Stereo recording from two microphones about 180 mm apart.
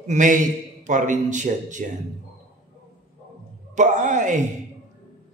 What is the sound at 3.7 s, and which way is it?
Speech, 45° right (ahead or behind).